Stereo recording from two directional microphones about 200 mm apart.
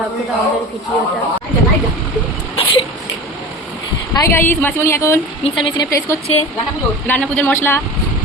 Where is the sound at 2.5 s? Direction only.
30° left (ahead or behind).